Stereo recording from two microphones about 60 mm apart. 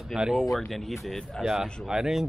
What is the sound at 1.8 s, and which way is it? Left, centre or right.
Speech, centre.